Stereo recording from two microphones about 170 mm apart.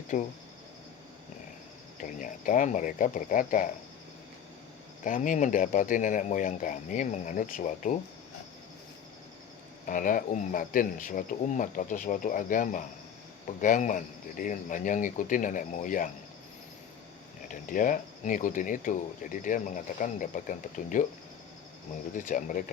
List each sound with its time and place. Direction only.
0.1 s speech: 45° left (ahead or behind)
2.0 s speech: 50° left (ahead or behind)
5.0 s speech: 50° left (ahead or behind)
9.8 s speech: 50° left (ahead or behind)
17.5 s speech: 50° left (ahead or behind)
22.1 s speech: 50° left (ahead or behind)